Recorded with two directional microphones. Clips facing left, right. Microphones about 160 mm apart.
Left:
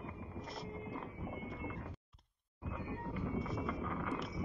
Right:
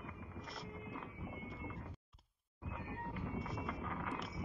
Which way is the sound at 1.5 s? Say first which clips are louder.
Left 4 dB; 75° left (ahead or behind).